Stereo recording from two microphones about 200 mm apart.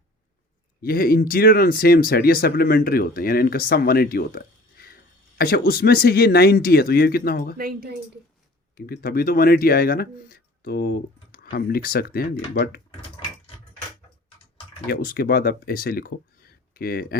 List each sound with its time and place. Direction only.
0.8 s speech: 45° left (ahead or behind)
7.5 s speech: 50° right (ahead or behind)
8.7 s speech: 50° left (ahead or behind)
14.8 s speech: 50° left (ahead or behind)